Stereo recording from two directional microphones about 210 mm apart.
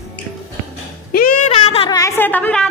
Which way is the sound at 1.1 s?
45° left (ahead or behind).